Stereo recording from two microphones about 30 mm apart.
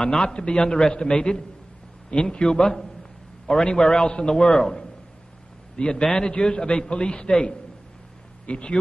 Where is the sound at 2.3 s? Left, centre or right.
Left.